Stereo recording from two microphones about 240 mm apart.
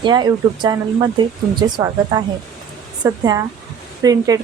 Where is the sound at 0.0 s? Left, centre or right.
Centre.